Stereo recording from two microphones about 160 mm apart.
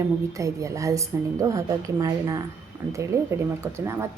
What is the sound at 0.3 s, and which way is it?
A woman's voice, 20° right (ahead or behind).